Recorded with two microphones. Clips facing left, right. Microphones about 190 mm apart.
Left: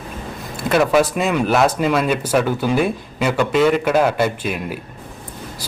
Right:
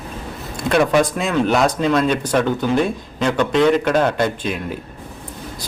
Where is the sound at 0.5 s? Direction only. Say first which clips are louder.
Even; 5° left (ahead or behind).